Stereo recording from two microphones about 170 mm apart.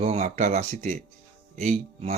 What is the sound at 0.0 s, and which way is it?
Speech, 40° right (ahead or behind).